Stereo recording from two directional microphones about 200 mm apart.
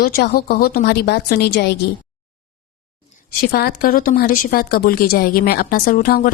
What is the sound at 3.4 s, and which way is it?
Speech, 50° left (ahead or behind).